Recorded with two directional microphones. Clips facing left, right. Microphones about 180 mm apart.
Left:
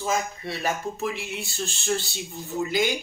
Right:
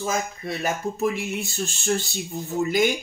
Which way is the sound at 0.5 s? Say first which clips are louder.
Right 3 dB; 45° right (ahead or behind).